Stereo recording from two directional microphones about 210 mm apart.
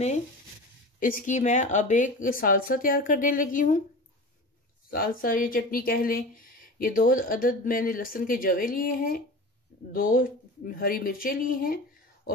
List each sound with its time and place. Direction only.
0.9 s speech: 40° left (ahead or behind)
4.9 s speech: 45° left (ahead or behind)